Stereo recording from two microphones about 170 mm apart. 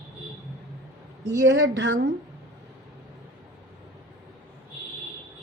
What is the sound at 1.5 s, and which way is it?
Speech, 90° right.